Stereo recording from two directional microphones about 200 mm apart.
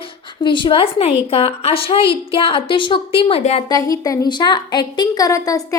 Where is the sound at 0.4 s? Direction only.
25° left (ahead or behind).